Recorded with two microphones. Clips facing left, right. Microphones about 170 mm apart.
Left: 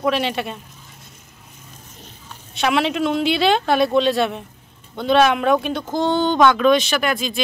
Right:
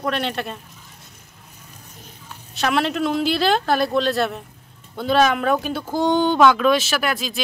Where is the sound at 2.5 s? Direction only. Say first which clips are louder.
Left 2 dB; centre (ahead or behind).